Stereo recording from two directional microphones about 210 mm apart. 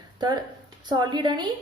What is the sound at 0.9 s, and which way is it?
Speech, 20° right (ahead or behind).